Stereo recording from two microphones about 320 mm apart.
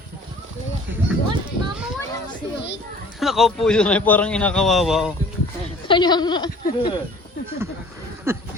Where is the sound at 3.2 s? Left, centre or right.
Centre.